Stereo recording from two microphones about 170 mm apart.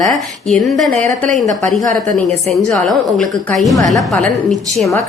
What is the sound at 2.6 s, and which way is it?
A woman's voice, centre (ahead or behind).